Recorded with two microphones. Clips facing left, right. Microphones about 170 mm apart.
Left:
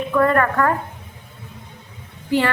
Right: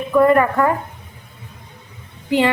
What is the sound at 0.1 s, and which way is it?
Speech, 10° right (ahead or behind).